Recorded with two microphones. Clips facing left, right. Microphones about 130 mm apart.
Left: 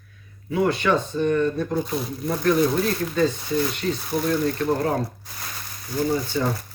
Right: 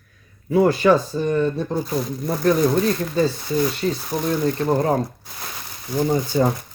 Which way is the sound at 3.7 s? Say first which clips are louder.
Right 2 dB; 35° right (ahead or behind).